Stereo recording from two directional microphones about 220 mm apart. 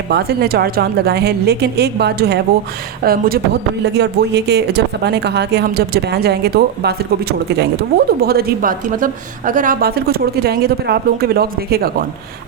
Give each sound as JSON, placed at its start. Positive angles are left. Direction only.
{"t": 0.1, "sound": "speech", "side_deg": -45}